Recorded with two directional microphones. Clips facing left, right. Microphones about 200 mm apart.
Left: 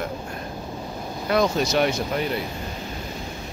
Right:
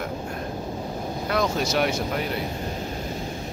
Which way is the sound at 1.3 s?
Centre (ahead or behind).